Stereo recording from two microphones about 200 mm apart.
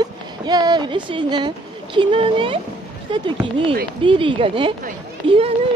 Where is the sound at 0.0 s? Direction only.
20° right (ahead or behind).